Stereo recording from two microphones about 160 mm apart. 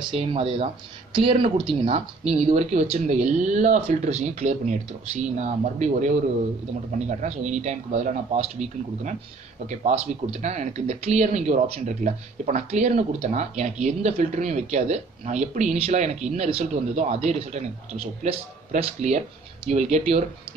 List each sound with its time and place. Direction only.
0.1 s speech: 35° right (ahead or behind)